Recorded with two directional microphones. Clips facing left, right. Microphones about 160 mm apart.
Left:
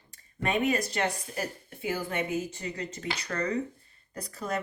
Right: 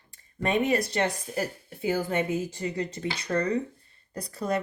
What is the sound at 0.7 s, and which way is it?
A woman's voice, 35° right (ahead or behind).